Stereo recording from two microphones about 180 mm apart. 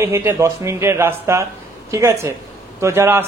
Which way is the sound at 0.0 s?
15° right (ahead or behind).